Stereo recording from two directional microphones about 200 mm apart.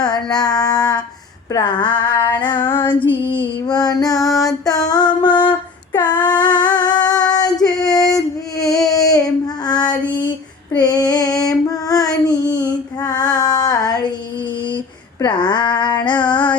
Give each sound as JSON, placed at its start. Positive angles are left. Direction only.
{"t": 0.3, "sound": "child singing", "side_deg": 20}
{"t": 1.5, "sound": "female singing", "side_deg": 20}
{"t": 5.9, "sound": "a sound", "side_deg": 20}
{"t": 7.3, "sound": "female singing", "side_deg": 20}
{"t": 8.9, "sound": "child singing", "side_deg": 15}
{"t": 15.2, "sound": "female singing", "side_deg": 20}